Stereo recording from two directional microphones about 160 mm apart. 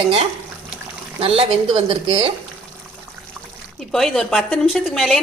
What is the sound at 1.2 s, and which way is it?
A woman's voice, 35° right (ahead or behind).